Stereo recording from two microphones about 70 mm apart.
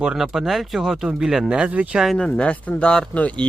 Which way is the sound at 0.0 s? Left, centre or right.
Centre.